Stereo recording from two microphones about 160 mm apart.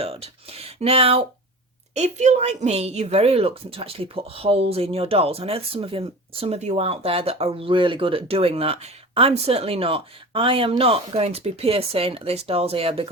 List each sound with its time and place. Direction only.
0.0 s a woman's voice: 40° right (ahead or behind)